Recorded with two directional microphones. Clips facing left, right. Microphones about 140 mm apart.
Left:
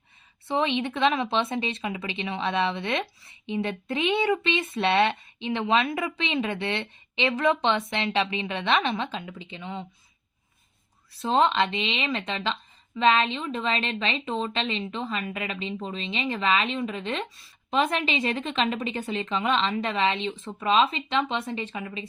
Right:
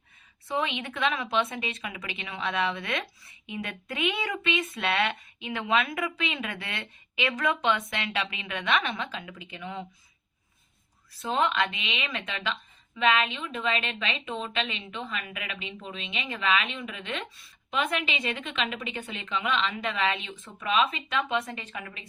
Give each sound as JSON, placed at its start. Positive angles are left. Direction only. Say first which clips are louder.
{"t": 0.4, "sound": "a woman's voice", "louder": "left 5 dB", "side_deg": 25}
{"t": 11.2, "sound": "a woman's voice", "louder": "left 4 dB", "side_deg": 30}